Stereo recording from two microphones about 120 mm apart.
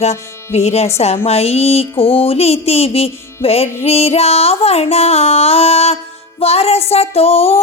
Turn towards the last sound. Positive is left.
turn(degrees=55)  # may be behind; listen again after turning